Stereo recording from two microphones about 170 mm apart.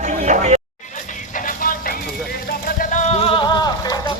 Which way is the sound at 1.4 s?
55° left (ahead or behind).